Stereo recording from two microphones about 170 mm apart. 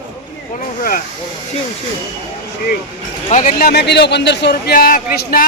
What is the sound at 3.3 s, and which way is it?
A man's voice, 55° left (ahead or behind).